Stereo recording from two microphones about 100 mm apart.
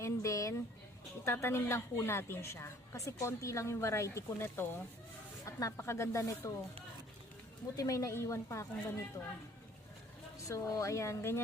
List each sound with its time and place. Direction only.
0.0 s a sound: 30° left (ahead or behind)
1.2 s speech: 25° left (ahead or behind)
5.5 s speech: 35° left (ahead or behind)
7.8 s a woman's voice: 35° left (ahead or behind)
10.4 s speech: 35° left (ahead or behind)